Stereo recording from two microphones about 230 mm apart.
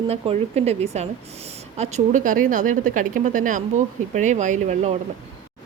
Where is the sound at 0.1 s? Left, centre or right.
Right.